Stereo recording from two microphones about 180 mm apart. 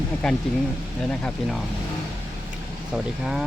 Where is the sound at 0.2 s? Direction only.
Centre (ahead or behind).